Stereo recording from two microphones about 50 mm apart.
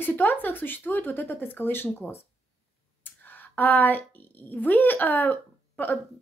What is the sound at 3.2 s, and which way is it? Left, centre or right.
A woman's voice, left.